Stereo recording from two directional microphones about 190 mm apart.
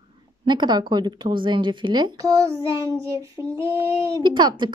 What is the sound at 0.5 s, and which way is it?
Speech, 20° right (ahead or behind).